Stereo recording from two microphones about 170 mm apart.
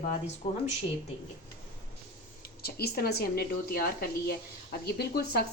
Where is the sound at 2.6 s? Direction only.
65° left (ahead or behind).